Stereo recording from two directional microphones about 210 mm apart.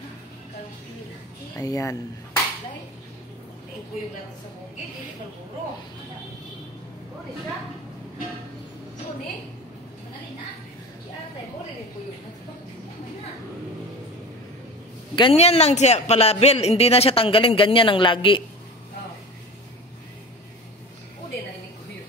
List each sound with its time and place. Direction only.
1.5 s speech: 15° left (ahead or behind)
15.1 s speech: 25° left (ahead or behind)